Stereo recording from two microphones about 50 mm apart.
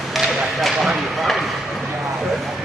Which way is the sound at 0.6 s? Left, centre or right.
Centre.